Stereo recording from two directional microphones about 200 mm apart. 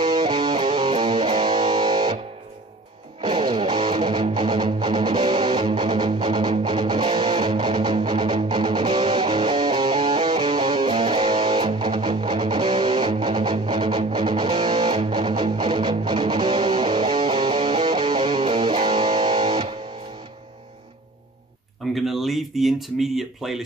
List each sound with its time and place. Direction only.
0.0 s music: 20° right (ahead or behind)
3.2 s music: 25° right (ahead or behind)
21.9 s a sound: centre (ahead or behind)